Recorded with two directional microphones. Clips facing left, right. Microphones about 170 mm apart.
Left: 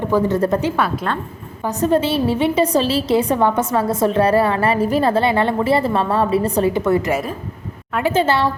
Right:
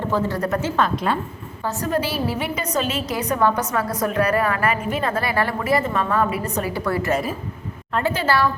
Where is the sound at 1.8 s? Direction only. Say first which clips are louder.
Left 7 dB; 25° left (ahead or behind).